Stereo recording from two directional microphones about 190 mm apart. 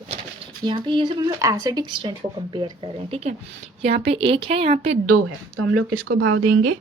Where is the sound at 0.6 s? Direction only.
25° right (ahead or behind).